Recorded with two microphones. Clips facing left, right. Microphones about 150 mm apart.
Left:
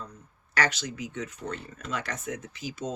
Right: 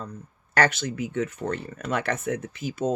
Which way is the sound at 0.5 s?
50° right (ahead or behind).